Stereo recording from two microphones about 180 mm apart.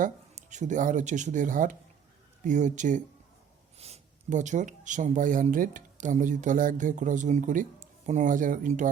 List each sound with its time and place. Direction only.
0.0 s speech: 40° right (ahead or behind)